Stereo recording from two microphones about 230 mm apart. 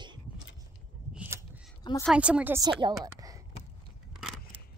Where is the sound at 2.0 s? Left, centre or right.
Centre.